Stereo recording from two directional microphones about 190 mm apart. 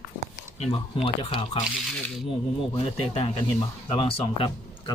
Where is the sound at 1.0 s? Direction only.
30° left (ahead or behind).